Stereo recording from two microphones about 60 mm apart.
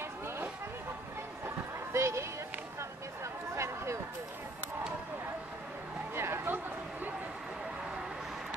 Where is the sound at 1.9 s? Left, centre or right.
Right.